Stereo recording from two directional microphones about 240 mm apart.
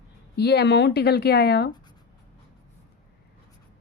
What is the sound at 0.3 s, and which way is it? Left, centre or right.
A woman's voice, left.